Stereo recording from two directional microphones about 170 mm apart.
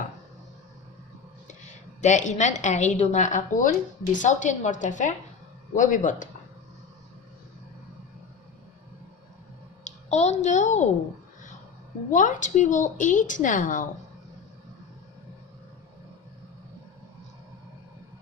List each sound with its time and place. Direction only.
2.0 s a woman's voice: 45° left (ahead or behind)
9.8 s a child's voice: 40° left (ahead or behind)
12.1 s a woman's voice: 45° left (ahead or behind)